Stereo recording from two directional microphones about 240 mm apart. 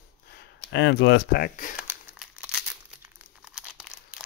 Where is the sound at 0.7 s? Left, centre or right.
Left.